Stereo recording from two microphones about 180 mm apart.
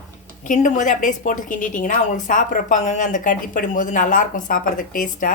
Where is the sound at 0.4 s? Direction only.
45° left (ahead or behind).